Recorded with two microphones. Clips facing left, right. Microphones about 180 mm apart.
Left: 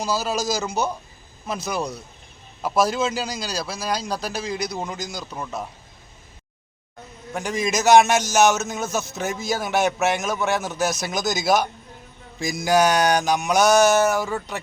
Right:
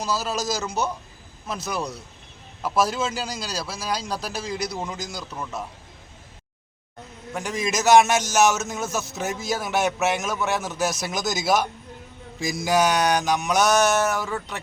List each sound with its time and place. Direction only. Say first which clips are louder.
0.0 s a man's voice: left 2 dB; centre (ahead or behind)
7.3 s a man's voice: left 2 dB; centre (ahead or behind)